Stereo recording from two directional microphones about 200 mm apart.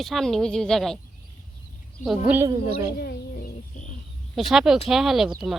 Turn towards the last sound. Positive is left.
turn(degrees=0)  # may be behind; listen again after turning